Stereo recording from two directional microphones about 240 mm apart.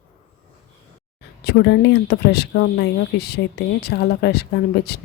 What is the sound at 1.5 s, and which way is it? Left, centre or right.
Speech, left.